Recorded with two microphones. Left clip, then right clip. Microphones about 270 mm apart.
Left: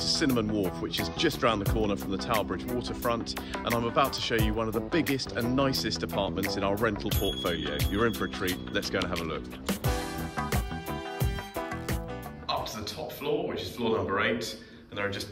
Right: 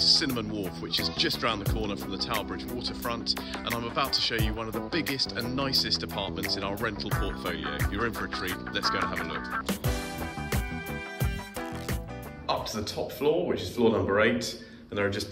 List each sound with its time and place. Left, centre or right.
0.2 s speech: centre
13.2 s speech: centre